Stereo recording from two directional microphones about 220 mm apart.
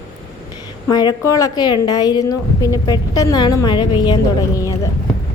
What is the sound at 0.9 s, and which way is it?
A woman's voice, 20° left (ahead or behind).